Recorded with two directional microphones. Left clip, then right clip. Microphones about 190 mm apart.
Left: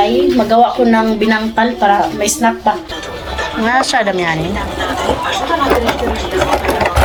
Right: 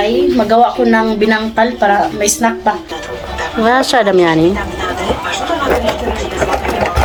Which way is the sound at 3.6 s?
30° right (ahead or behind).